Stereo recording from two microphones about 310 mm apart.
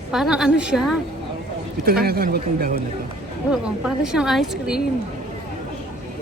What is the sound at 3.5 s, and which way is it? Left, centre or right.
A woman's voice, centre.